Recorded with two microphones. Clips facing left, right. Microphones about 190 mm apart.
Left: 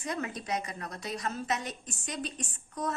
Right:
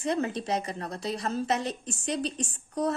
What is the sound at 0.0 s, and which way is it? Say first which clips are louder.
A woman's voice: right 7 dB; 30° right (ahead or behind).